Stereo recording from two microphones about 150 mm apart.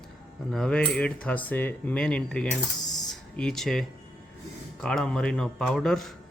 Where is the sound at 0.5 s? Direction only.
5° left (ahead or behind).